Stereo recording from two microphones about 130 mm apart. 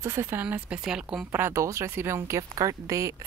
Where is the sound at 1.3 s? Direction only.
15° right (ahead or behind).